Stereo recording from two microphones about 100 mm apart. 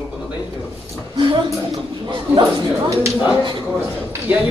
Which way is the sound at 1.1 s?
55° right (ahead or behind).